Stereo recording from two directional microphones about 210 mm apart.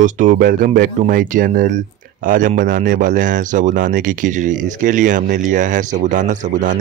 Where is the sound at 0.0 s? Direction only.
40° right (ahead or behind).